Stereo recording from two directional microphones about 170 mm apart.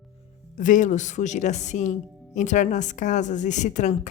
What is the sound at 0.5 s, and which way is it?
Speech, 45° left (ahead or behind).